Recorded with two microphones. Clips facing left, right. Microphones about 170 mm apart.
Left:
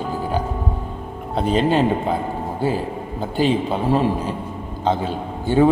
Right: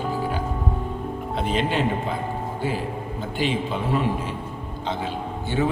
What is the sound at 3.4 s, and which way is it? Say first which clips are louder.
A man's voice: left 6 dB; 40° left (ahead or behind).